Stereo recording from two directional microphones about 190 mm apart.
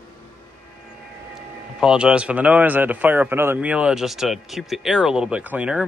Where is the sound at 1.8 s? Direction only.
5° right (ahead or behind).